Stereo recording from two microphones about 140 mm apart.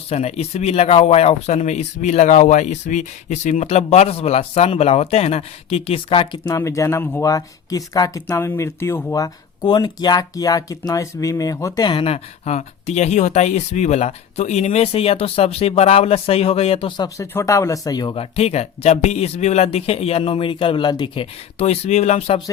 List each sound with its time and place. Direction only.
0.1 s speech: 50° left (ahead or behind); by 6.6 s 30° left (ahead or behind)
6.6 s speech: 20° left (ahead or behind); by 17.1 s 40° left (ahead or behind)
17.2 s speech: 25° left (ahead or behind); by 22.4 s 50° left (ahead or behind)